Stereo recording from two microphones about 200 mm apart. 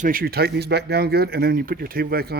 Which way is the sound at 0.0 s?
45° right (ahead or behind).